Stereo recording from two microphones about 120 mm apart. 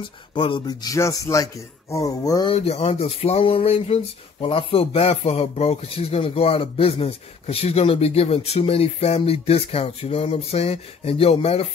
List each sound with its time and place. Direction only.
0.3 s a sound: 45° left (ahead or behind)
0.7 s speech: 30° left (ahead or behind)
2.4 s speech: 55° left (ahead or behind)